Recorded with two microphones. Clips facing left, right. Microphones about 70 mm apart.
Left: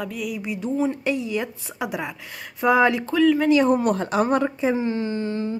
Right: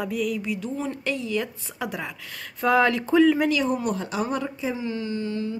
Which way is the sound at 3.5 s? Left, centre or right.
Left.